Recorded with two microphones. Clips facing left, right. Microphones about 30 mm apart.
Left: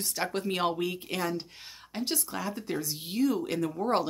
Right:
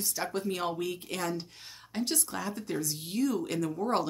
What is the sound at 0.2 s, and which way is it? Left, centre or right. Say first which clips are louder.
Speech: left 3 dB; left.